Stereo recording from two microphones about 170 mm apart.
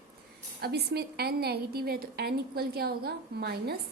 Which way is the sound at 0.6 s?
65° right (ahead or behind).